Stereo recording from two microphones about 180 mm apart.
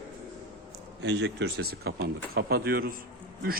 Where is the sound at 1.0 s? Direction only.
75° right (ahead or behind).